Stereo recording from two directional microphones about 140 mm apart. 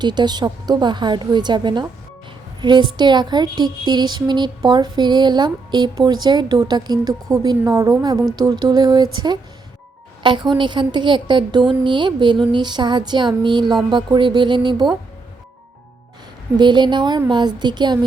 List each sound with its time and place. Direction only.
0.0 s a woman's voice: 30° right (ahead or behind)
16.6 s a woman's voice: 35° right (ahead or behind)